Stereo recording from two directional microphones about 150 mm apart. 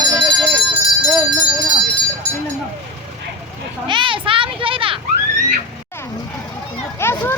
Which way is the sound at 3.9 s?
35° right (ahead or behind).